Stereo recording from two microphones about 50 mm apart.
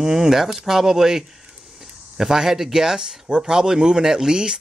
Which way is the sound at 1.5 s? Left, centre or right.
Centre.